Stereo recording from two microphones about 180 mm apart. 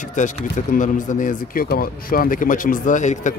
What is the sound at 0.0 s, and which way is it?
Speech, 45° left (ahead or behind).